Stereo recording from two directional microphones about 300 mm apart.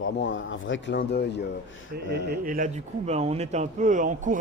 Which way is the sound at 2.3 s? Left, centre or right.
Right.